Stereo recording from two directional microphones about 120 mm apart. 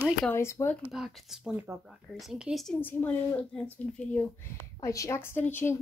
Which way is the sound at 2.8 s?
15° left (ahead or behind).